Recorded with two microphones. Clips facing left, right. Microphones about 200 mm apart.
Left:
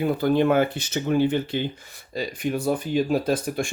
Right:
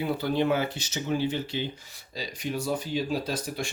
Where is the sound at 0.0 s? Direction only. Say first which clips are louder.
Left 6 dB; 50° left (ahead or behind).